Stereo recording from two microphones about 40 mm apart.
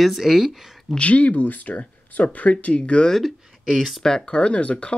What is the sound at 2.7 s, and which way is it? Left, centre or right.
Speech, left.